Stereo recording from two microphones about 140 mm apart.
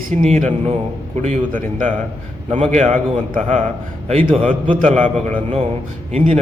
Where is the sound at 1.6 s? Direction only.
70° right (ahead or behind).